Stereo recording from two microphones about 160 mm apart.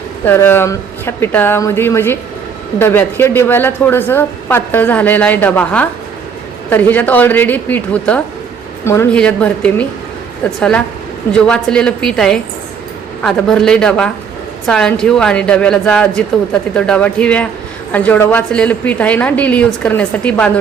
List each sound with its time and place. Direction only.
0.3 s a woman's voice: 15° left (ahead or behind)